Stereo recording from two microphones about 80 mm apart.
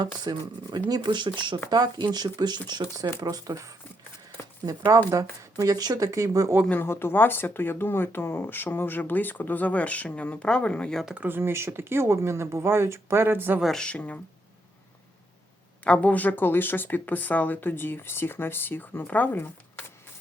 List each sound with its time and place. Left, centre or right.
0.0 s speech: right
1.7 s speech: right
3.2 s speech: right
4.4 s a sound: left
5.1 s speech: right
6.7 s speech: left; by 11.0 s centre
11.2 s speech: right
13.6 s speech: centre
13.8 s speech: centre
15.8 s speech: centre